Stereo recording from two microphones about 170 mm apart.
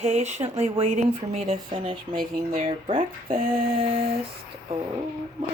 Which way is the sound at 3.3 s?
55° right (ahead or behind).